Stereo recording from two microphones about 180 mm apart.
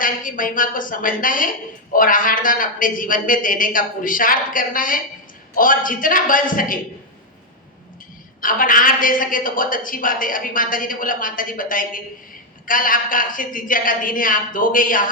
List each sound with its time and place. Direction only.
0.0 s a woman's voice: 50° left (ahead or behind)
8.4 s a woman's voice: 50° left (ahead or behind)